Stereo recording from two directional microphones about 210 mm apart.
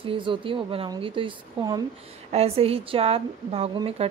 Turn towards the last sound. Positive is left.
turn(degrees=-25)  # may be behind; listen again after turning